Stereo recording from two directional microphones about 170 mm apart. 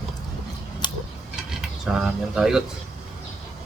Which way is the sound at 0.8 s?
25° left (ahead or behind).